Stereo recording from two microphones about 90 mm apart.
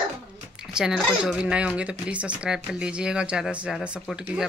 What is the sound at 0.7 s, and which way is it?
Speech, 5° right (ahead or behind).